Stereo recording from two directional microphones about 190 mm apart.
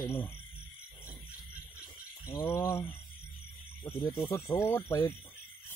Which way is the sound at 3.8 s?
25° left (ahead or behind).